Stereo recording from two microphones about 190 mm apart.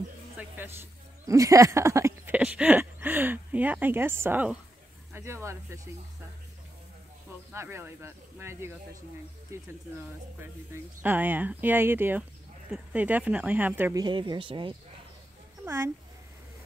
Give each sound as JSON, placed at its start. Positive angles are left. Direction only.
{"t": 0.4, "sound": "speech", "side_deg": -10}
{"t": 7.5, "sound": "speech", "side_deg": -15}
{"t": 10.4, "sound": "speech", "side_deg": -10}
{"t": 14.0, "sound": "speech", "side_deg": -25}
{"t": 15.6, "sound": "speech", "side_deg": -15}